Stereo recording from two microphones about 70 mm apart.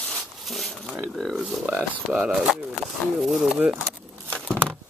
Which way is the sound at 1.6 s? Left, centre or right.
Right.